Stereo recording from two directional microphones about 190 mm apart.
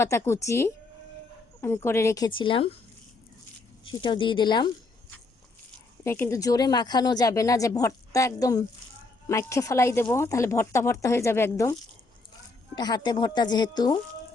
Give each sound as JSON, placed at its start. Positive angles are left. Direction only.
{"t": 0.0, "sound": "speech", "side_deg": 15}
{"t": 4.0, "sound": "speech", "side_deg": 25}
{"t": 6.1, "sound": "speech", "side_deg": 10}